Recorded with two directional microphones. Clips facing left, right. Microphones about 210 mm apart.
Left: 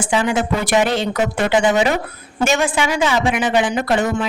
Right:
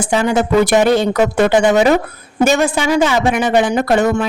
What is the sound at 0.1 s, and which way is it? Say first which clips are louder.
Speech: right 5 dB; 40° right (ahead or behind).